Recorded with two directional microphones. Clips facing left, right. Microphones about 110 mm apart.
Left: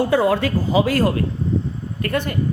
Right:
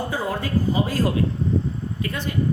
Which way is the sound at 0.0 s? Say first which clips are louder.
Left 9 dB; 75° left (ahead or behind).